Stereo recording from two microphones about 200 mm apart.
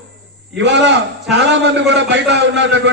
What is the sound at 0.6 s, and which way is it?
A man's voice, 60° right (ahead or behind).